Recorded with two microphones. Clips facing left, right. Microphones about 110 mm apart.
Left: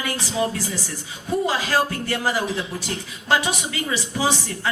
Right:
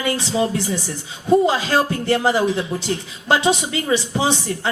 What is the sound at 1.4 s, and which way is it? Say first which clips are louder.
A woman's voice: right 4 dB; 25° right (ahead or behind).